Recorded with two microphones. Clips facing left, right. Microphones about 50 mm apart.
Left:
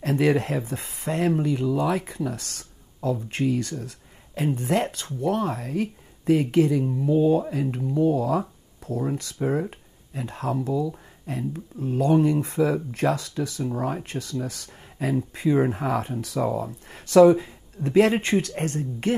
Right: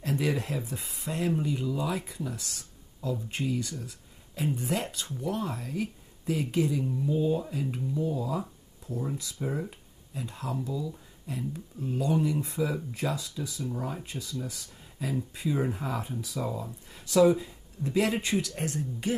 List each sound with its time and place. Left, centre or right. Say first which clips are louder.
0.0 s speech: left 8 dB; left
9.4 s speech: left 9 dB; left
11.5 s speech: left 6 dB; left
16.3 s speech: left 9 dB; left